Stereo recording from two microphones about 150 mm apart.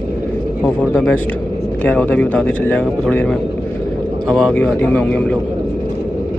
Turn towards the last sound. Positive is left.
turn(degrees=5)  # may be behind; listen again after turning